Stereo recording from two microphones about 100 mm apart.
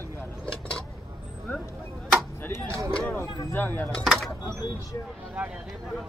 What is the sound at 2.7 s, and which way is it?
Speech, 30° right (ahead or behind).